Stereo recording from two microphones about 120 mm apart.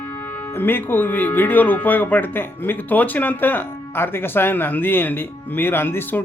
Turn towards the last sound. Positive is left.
turn(degrees=15)  # may be behind; listen again after turning